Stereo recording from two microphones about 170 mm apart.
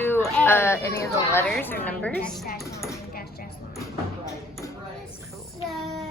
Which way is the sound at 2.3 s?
65° left (ahead or behind).